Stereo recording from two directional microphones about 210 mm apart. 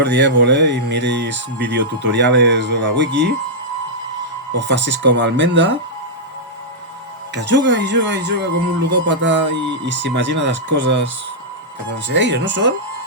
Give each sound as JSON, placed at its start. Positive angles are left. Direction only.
{"t": 0.0, "sound": "speech", "side_deg": -55}
{"t": 4.5, "sound": "speech", "side_deg": -55}
{"t": 7.3, "sound": "speech", "side_deg": -55}
{"t": 12.0, "sound": "speech", "side_deg": -55}